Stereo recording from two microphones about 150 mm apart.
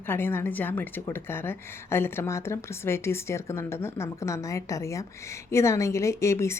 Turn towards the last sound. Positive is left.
turn(degrees=20)  # may be behind; listen again after turning